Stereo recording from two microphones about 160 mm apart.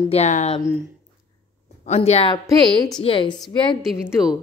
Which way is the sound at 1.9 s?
40° left (ahead or behind).